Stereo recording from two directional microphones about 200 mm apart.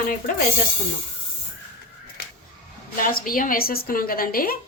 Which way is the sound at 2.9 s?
45° left (ahead or behind).